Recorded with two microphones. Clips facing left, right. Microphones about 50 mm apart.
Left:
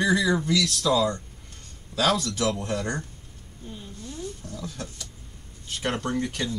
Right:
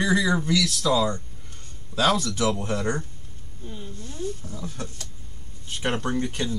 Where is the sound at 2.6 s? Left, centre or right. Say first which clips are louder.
Right 2 dB; centre.